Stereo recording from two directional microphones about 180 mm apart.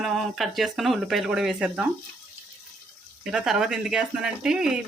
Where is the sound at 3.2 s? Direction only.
5° right (ahead or behind).